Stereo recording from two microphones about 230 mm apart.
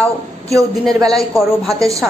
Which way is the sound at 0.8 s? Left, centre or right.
Centre.